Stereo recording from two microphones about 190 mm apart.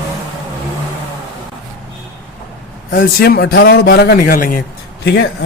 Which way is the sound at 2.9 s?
50° left (ahead or behind).